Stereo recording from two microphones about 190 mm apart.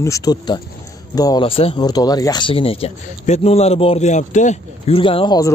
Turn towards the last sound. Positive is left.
turn(degrees=20)  # may be behind; listen again after turning